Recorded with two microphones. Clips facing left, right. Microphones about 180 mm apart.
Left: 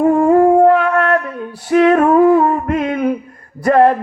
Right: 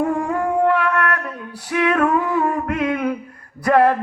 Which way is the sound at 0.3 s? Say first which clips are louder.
Left 10 dB; 40° left (ahead or behind).